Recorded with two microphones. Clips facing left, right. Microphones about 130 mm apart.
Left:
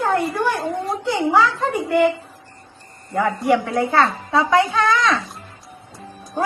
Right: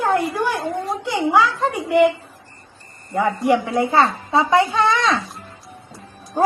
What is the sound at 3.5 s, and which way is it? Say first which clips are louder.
A woman's voice: even; 20° right (ahead or behind).